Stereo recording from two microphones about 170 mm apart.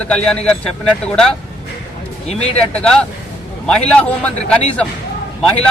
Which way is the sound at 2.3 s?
40° left (ahead or behind).